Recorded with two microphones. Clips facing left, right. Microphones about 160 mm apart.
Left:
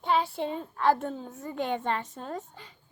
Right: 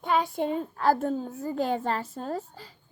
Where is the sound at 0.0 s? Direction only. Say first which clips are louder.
Right 1 dB; 45° right (ahead or behind).